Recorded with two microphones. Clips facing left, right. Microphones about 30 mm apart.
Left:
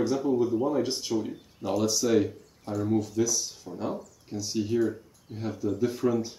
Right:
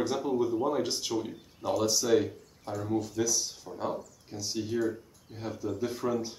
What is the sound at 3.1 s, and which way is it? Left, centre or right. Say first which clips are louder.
Speech: left 3 dB; centre.